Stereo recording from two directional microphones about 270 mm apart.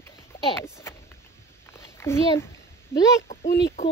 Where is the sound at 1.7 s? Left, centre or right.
Centre.